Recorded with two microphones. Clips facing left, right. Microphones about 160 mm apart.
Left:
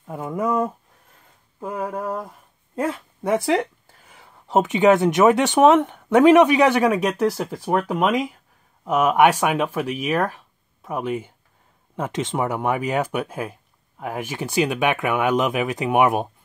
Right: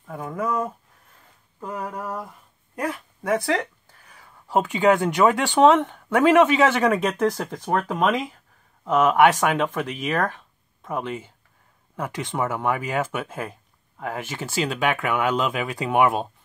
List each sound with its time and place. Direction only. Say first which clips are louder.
0.0 s speech: left 3 dB; 20° left (ahead or behind)